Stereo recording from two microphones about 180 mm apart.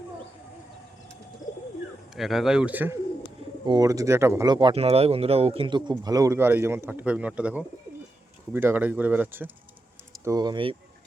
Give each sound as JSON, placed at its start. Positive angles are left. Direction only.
{"t": 1.4, "sound": "bird", "side_deg": 45}
{"t": 2.1, "sound": "speech", "side_deg": 0}
{"t": 3.7, "sound": "speech", "side_deg": -20}
{"t": 10.2, "sound": "speech", "side_deg": -20}